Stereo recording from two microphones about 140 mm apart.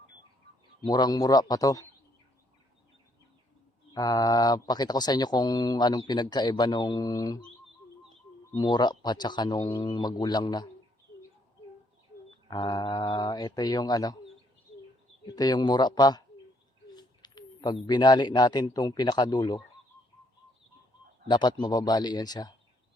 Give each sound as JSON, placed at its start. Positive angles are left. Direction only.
{"t": 0.8, "sound": "speech", "side_deg": 30}
{"t": 3.9, "sound": "speech", "side_deg": 25}
{"t": 8.5, "sound": "speech", "side_deg": 30}
{"t": 12.5, "sound": "speech", "side_deg": 30}
{"t": 15.3, "sound": "speech", "side_deg": 30}
{"t": 16.9, "sound": "bird", "side_deg": 30}
{"t": 17.8, "sound": "speech", "side_deg": 30}
{"t": 21.2, "sound": "speech", "side_deg": 35}